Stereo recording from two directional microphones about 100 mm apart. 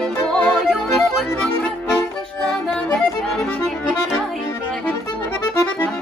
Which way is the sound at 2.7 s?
5° left (ahead or behind).